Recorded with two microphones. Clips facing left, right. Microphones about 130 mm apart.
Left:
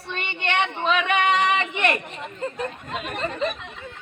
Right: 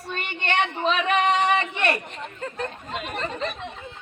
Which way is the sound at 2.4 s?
5° left (ahead or behind).